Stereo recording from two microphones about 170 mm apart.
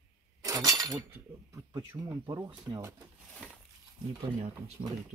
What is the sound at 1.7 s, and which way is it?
Speech, 20° right (ahead or behind).